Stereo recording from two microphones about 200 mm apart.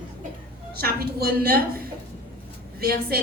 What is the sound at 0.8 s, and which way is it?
A woman's voice, 50° right (ahead or behind).